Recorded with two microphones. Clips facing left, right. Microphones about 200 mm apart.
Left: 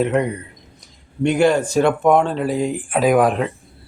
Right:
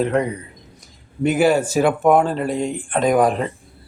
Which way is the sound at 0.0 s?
Centre (ahead or behind).